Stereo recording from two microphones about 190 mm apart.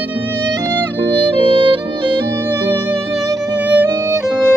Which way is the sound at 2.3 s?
15° right (ahead or behind).